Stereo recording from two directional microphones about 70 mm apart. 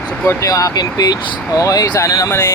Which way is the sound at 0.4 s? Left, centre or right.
Left.